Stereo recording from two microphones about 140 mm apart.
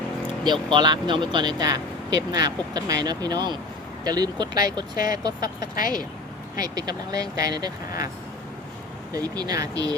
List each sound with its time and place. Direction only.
0.4 s speech: 35° right (ahead or behind)
6.6 s speech: 30° right (ahead or behind)
9.1 s speech: 30° right (ahead or behind)